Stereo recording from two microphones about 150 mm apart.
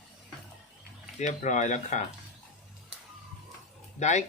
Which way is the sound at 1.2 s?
55° left (ahead or behind).